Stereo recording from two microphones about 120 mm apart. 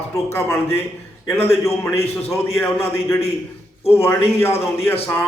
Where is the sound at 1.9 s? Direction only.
60° left (ahead or behind).